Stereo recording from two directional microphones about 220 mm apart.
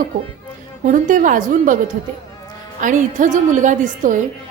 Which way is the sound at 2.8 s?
35° right (ahead or behind).